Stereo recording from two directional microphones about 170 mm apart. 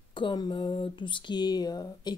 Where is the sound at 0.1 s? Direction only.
25° left (ahead or behind).